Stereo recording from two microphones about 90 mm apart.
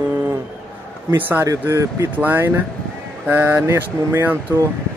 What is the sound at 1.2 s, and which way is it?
A man's voice, 20° right (ahead or behind).